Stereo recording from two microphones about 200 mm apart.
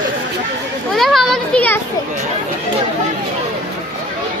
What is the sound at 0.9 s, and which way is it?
Children playing, centre (ahead or behind).